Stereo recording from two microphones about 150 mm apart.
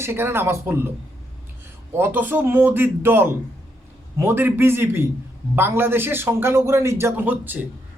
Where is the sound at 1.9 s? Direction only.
15° right (ahead or behind).